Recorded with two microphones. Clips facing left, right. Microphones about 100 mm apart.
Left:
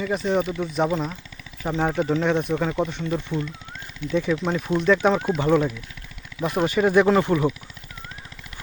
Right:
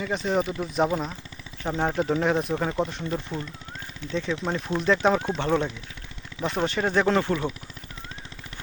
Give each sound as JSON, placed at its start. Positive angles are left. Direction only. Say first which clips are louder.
{"t": 0.0, "sound": "speech", "louder": "left 3 dB", "side_deg": 0}
{"t": 3.3, "sound": "speech", "louder": "left 5 dB", "side_deg": -35}
{"t": 4.1, "sound": "speech", "louder": "left 5 dB", "side_deg": 5}